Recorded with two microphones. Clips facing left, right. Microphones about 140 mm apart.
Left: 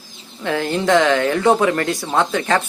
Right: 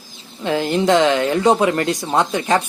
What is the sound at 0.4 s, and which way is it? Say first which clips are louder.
Speech: right 2 dB; 20° right (ahead or behind).